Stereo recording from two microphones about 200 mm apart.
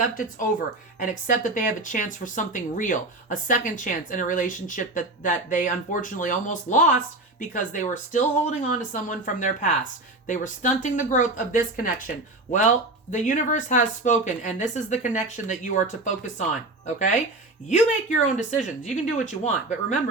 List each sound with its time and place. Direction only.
0.1 s speech: 40° left (ahead or behind)
18.3 s speech: 40° left (ahead or behind)